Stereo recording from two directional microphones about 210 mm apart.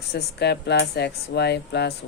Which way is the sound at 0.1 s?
50° left (ahead or behind).